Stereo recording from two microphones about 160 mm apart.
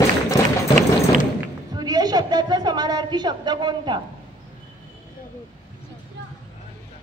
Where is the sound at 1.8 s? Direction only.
25° right (ahead or behind).